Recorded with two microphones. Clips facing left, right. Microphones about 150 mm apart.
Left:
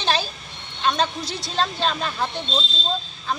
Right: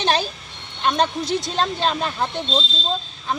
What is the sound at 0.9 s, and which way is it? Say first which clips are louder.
Speech: right 4 dB; 20° right (ahead or behind).